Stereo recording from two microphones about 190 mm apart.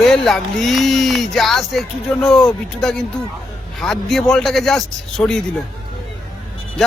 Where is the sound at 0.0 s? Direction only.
Centre (ahead or behind).